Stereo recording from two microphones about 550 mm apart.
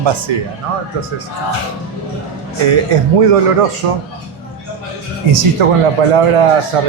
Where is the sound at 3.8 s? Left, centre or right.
Right.